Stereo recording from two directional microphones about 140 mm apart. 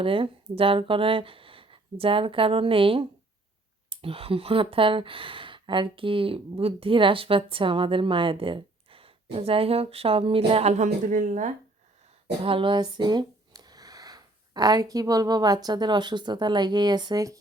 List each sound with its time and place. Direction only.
0.0 s speech: 40° right (ahead or behind); by 11.5 s 65° right (ahead or behind)
12.4 s speech: 40° right (ahead or behind)